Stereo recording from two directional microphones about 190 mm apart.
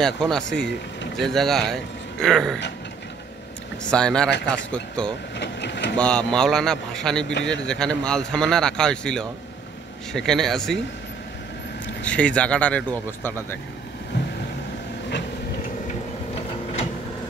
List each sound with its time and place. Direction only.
0.0 s a man's voice: 5° left (ahead or behind)
3.8 s a man's voice: 5° left (ahead or behind)
5.4 s speech: 65° left (ahead or behind)
5.9 s a man's voice: 5° left (ahead or behind)
12.0 s speech: 5° left (ahead or behind)